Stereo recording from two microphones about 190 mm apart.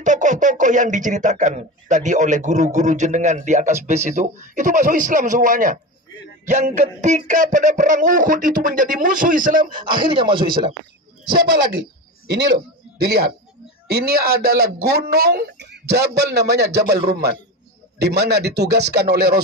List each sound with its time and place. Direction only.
0.0 s speech: 40° right (ahead or behind)
6.4 s a sound: 40° right (ahead or behind)
9.7 s speech: 25° right (ahead or behind)
13.0 s speech: 55° right (ahead or behind)